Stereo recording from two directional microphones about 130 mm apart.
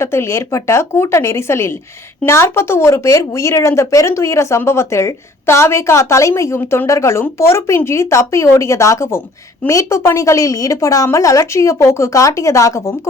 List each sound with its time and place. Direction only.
0.0 s speech: 20° left (ahead or behind)